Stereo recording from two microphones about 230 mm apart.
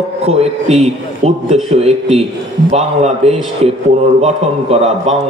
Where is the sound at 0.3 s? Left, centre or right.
Right.